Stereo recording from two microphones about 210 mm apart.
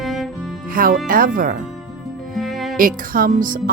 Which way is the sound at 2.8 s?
40° right (ahead or behind).